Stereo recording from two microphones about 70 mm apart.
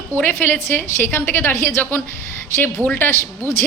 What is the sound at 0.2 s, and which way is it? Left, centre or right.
A man's voice, left.